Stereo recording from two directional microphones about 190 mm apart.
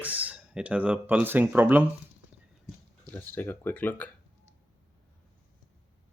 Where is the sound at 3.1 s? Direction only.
10° left (ahead or behind).